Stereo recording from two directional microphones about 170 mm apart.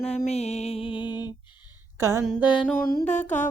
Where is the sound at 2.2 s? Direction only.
5° right (ahead or behind).